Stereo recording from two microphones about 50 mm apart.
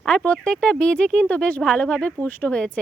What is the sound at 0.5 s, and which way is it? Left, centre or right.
A woman's voice, centre.